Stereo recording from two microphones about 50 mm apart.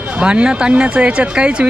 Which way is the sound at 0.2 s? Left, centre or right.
Right.